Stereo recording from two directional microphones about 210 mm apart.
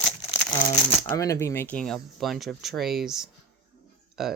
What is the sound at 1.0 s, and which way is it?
Speech, 15° left (ahead or behind).